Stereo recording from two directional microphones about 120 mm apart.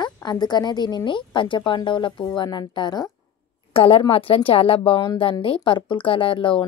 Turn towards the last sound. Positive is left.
turn(degrees=45)  # may be behind; listen again after turning